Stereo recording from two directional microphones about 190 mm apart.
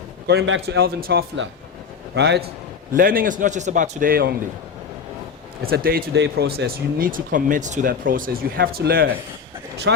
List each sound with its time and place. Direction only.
0.3 s a man's voice: 75° right (ahead or behind)
2.9 s speech: 50° right (ahead or behind)
5.6 s speech: 50° right (ahead or behind)
9.9 s speech: 65° right (ahead or behind)